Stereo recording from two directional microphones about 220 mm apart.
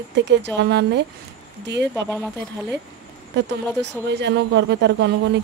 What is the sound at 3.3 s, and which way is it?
Speech, 50° right (ahead or behind).